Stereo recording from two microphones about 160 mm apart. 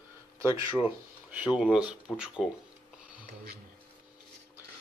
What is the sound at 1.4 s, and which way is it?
Speech, 5° right (ahead or behind).